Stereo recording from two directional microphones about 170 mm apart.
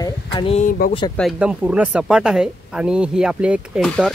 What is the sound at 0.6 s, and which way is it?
Speech, 50° left (ahead or behind).